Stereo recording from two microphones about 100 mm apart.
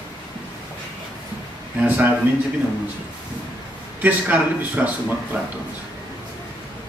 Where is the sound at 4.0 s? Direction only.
15° right (ahead or behind).